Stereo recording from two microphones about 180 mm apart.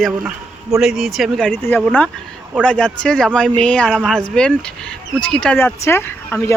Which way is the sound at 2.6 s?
5° left (ahead or behind).